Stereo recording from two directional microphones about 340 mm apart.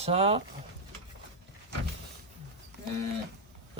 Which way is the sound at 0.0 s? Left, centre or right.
Centre.